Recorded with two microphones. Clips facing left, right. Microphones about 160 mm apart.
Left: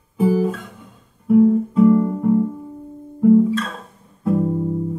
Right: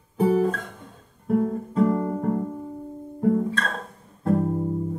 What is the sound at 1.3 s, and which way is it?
Guitar, 40° right (ahead or behind).